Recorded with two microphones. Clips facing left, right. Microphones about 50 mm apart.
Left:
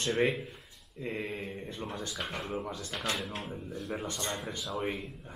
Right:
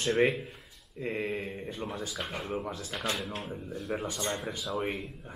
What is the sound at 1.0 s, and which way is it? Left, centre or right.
Speech, centre.